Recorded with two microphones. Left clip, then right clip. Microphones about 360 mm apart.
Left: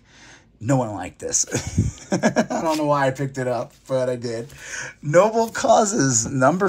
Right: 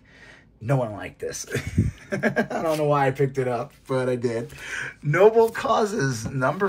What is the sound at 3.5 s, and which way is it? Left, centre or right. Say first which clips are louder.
Speech: left 3 dB; centre.